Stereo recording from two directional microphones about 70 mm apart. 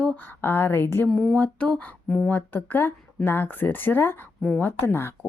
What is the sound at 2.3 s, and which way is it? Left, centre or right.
A woman's voice, left.